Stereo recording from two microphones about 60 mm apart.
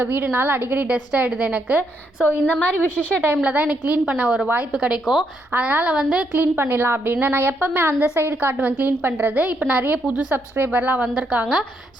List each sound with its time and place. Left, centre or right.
0.0 s a woman's voice: right
2.2 s a woman's voice: left
3.4 s a woman's voice: right
5.5 s a woman's voice: right
6.3 s a woman's voice: right; by 11.4 s centre